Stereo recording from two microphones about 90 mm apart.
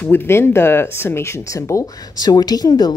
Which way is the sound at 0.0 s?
25° left (ahead or behind).